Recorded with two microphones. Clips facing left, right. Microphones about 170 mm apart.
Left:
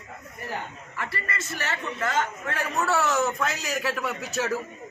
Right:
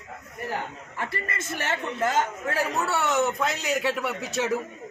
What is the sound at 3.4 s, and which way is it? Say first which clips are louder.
Speech: right 2 dB; 25° right (ahead or behind).